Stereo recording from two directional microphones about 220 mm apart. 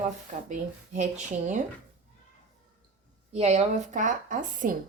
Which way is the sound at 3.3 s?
30° right (ahead or behind).